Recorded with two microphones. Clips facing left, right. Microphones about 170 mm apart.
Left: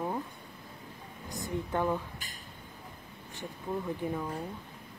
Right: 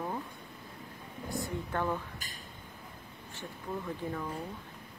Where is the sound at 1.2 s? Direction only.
20° left (ahead or behind).